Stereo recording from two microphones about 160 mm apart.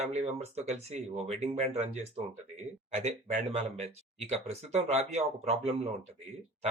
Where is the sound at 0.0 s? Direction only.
45° right (ahead or behind).